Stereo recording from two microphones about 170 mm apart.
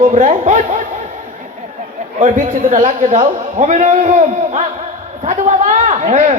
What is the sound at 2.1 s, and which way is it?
A woman's voice, 50° right (ahead or behind).